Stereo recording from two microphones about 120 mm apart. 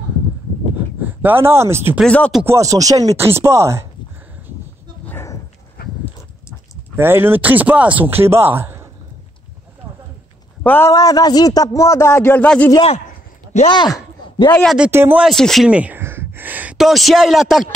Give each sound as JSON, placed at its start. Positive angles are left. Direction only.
{"t": 1.0, "sound": "speech", "side_deg": -15}
{"t": 2.0, "sound": "a sound", "side_deg": 10}
{"t": 2.4, "sound": "speech", "side_deg": -25}
{"t": 5.0, "sound": "dog", "side_deg": 20}
{"t": 7.0, "sound": "speech", "side_deg": -20}
{"t": 10.6, "sound": "a man's voice", "side_deg": 15}
{"t": 10.9, "sound": "a man's voice", "side_deg": 30}
{"t": 12.4, "sound": "a sound", "side_deg": 10}
{"t": 13.7, "sound": "a sound", "side_deg": 35}
{"t": 14.9, "sound": "speech", "side_deg": -20}
{"t": 15.2, "sound": "speech", "side_deg": 5}
{"t": 15.7, "sound": "a sound", "side_deg": -15}
{"t": 16.7, "sound": "speech", "side_deg": 0}